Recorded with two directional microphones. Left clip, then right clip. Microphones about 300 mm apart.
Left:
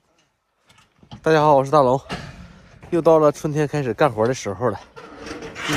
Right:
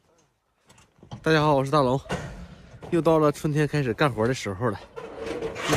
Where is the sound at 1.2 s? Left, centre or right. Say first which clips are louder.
Left 6 dB; centre.